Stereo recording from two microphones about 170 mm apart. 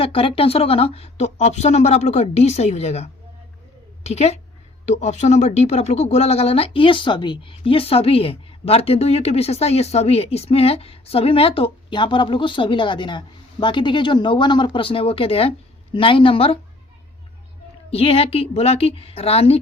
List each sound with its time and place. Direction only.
0.0 s speech: 35° left (ahead or behind)
17.9 s speech: 35° left (ahead or behind)